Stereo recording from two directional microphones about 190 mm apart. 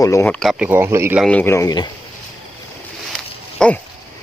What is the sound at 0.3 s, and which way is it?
Speech, centre (ahead or behind).